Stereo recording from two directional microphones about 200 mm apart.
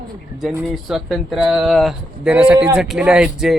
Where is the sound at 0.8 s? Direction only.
Centre (ahead or behind).